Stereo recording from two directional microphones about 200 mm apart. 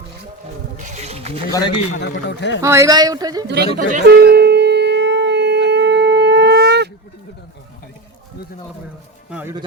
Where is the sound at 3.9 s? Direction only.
45° right (ahead or behind).